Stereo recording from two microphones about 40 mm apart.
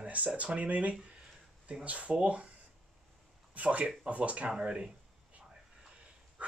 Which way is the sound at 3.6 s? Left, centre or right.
Right.